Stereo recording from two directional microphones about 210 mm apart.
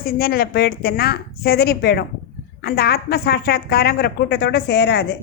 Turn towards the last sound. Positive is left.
turn(degrees=50)  # may be behind; listen again after turning